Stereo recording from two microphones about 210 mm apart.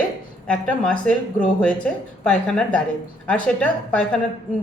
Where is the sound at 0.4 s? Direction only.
5° left (ahead or behind).